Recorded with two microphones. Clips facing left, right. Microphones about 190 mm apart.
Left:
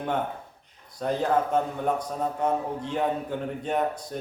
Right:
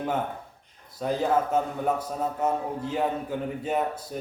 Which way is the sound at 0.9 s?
5° right (ahead or behind).